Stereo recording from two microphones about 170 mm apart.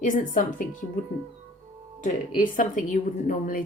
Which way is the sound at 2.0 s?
50° left (ahead or behind).